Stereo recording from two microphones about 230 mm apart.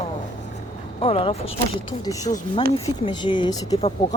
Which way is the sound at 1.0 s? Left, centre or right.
Left.